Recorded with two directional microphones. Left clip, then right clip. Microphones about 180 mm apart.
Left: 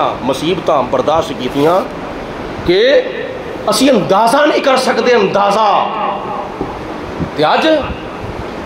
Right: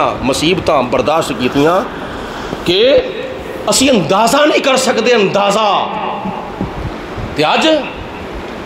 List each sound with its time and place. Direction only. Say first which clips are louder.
0.0 s speech: right 1 dB; 45° right (ahead or behind)
2.7 s a man's voice: even; 25° right (ahead or behind)
7.3 s a man's voice: even; 40° right (ahead or behind)